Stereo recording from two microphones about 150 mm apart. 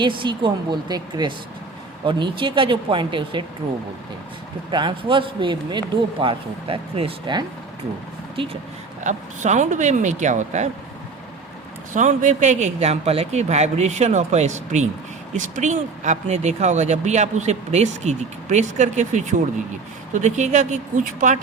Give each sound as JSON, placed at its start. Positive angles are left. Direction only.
{"t": 0.0, "sound": "speech", "side_deg": -35}
{"t": 4.7, "sound": "speech", "side_deg": -30}
{"t": 9.0, "sound": "speech", "side_deg": -55}
{"t": 11.9, "sound": "speech", "side_deg": -55}